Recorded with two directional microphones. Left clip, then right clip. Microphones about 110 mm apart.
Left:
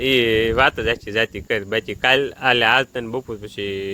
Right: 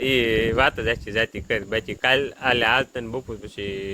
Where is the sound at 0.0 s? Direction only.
50° left (ahead or behind).